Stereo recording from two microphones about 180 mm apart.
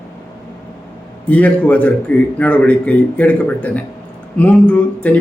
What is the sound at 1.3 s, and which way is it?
A man's voice, 10° left (ahead or behind).